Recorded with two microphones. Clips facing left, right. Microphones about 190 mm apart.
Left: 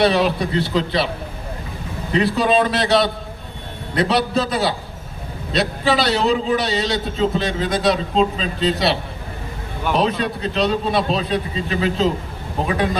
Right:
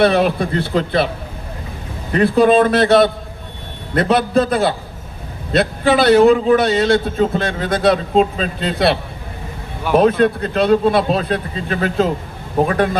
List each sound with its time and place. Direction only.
0.0 s a man's voice: 55° right (ahead or behind)
2.1 s a man's voice: 55° right (ahead or behind)